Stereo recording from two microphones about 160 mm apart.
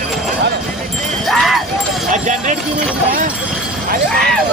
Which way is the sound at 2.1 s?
50° right (ahead or behind).